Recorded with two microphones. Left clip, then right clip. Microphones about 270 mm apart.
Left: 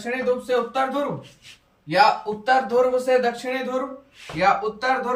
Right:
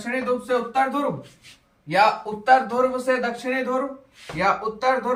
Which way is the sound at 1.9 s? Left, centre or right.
Centre.